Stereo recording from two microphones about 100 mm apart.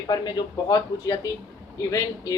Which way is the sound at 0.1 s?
45° left (ahead or behind).